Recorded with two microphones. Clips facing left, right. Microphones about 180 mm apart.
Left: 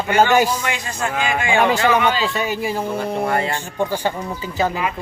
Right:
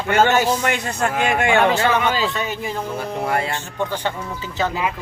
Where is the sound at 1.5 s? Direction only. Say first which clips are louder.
Left 4 dB; 10° left (ahead or behind).